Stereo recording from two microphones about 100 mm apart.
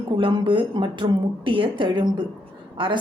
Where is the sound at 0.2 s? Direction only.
55° right (ahead or behind).